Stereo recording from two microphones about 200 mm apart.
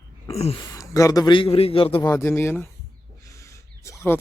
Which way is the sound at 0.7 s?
15° left (ahead or behind).